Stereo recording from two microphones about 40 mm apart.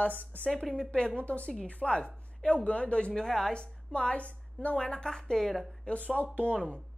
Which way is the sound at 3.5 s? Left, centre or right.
Left.